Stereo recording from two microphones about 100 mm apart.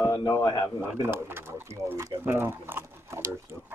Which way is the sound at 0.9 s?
25° right (ahead or behind).